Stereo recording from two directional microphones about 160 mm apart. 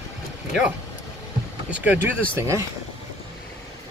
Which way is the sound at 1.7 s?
10° right (ahead or behind).